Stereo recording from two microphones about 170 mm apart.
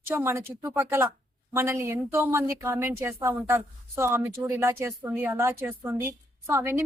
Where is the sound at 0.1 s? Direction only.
15° right (ahead or behind).